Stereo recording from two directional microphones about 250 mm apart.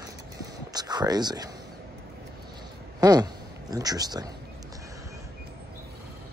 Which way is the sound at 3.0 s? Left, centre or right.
Centre.